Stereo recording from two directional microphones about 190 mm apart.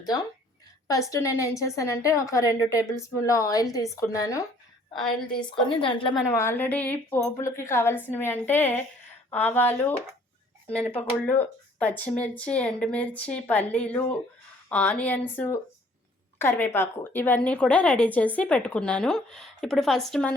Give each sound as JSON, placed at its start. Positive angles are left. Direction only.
{"t": 0.9, "sound": "a woman's voice", "side_deg": 15}
{"t": 5.0, "sound": "a woman's voice", "side_deg": 5}
{"t": 5.6, "sound": "a woman's voice", "side_deg": 25}
{"t": 6.2, "sound": "a woman's voice", "side_deg": 15}
{"t": 10.9, "sound": "a woman's voice", "side_deg": 10}